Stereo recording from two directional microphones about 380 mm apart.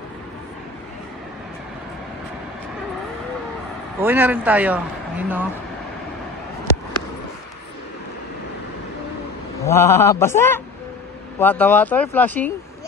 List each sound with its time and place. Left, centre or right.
4.0 s speech: centre
9.6 s speech: centre